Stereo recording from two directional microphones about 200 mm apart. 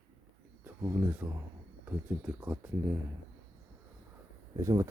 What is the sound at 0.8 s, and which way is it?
Speech, 10° right (ahead or behind).